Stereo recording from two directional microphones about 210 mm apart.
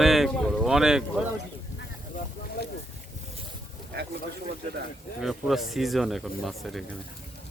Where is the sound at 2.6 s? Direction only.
50° left (ahead or behind).